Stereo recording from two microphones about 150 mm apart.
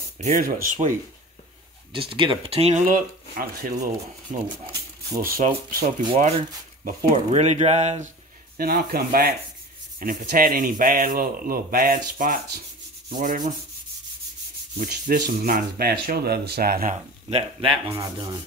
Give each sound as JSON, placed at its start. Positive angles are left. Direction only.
{"t": 0.2, "sound": "speech", "side_deg": -60}
{"t": 1.9, "sound": "speech", "side_deg": -35}
{"t": 2.8, "sound": "speech", "side_deg": -65}
{"t": 4.3, "sound": "speech", "side_deg": -50}
{"t": 5.1, "sound": "speech", "side_deg": -20}
{"t": 5.7, "sound": "speech", "side_deg": -70}
{"t": 6.0, "sound": "speech", "side_deg": -45}
{"t": 8.5, "sound": "speech", "side_deg": -80}
{"t": 9.9, "sound": "speech", "side_deg": -70}
{"t": 13.1, "sound": "speech", "side_deg": -65}
{"t": 14.8, "sound": "speech", "side_deg": -65}
{"t": 16.9, "sound": "speech", "side_deg": -40}